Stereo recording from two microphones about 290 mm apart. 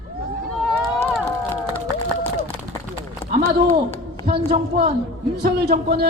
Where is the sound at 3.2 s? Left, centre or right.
Centre.